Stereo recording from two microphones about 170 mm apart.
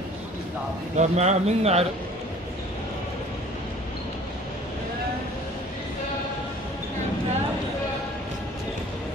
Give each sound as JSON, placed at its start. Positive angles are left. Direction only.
{"t": 0.9, "sound": "a man's voice", "side_deg": -40}